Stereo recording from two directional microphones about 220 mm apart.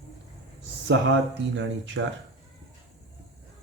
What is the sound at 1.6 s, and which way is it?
Speech, 55° right (ahead or behind).